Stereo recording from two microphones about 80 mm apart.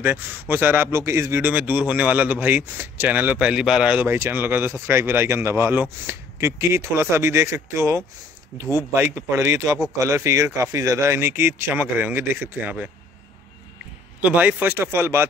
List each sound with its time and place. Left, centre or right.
0.0 s speech: right
1.4 s speech: right
4.1 s speech: right
14.2 s speech: centre